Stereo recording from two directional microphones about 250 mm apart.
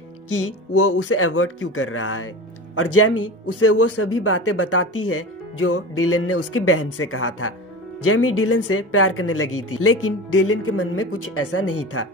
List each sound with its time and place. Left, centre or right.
0.7 s speech: left